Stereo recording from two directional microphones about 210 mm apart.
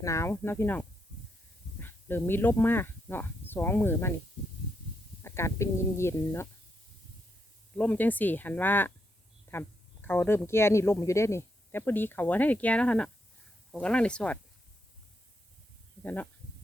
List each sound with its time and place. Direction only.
0.0 s speech: 15° left (ahead or behind)
5.2 s speech: 10° left (ahead or behind)
7.8 s speech: 10° left (ahead or behind)
16.0 s speech: 10° left (ahead or behind)